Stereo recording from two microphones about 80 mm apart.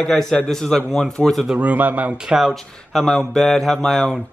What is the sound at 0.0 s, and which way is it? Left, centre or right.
A man's voice, centre.